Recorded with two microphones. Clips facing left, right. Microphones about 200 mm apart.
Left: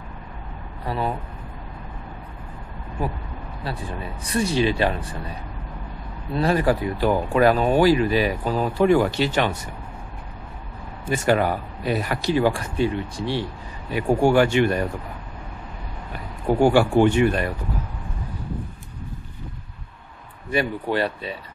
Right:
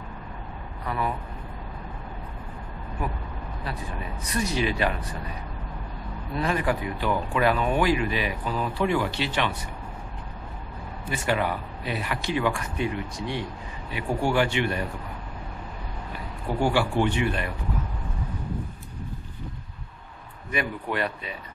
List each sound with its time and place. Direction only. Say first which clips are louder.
0.8 s speech: left 3 dB; 30° left (ahead or behind)
3.0 s speech: left 4 dB; 30° left (ahead or behind)
6.3 s speech: left 6 dB; 35° left (ahead or behind)
11.1 s speech: left 6 dB; 45° left (ahead or behind)
13.9 s speech: left 7 dB; 45° left (ahead or behind)
16.4 s speech: left 7 dB; 45° left (ahead or behind)
20.5 s speech: left 6 dB; 30° left (ahead or behind)